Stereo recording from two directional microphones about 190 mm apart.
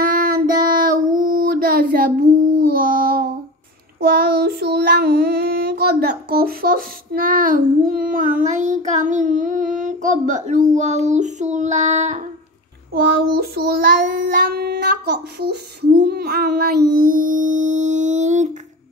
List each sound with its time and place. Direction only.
0.0 s child singing: 50° right (ahead or behind)
12.9 s child singing: 55° right (ahead or behind)
14.4 s a sound: 55° right (ahead or behind)
15.4 s child singing: 60° right (ahead or behind); by 18.5 s 40° right (ahead or behind)